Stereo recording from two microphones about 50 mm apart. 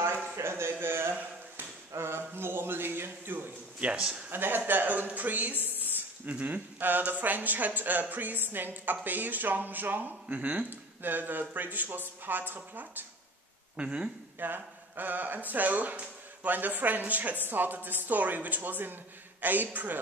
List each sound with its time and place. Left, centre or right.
0.0 s a sound: right
3.8 s speech: right
4.3 s speech: right
5.8 s a sound: right
6.4 s speech: right
10.2 s speech: right
10.7 s speech: right
13.7 s speech: right
14.4 s speech: right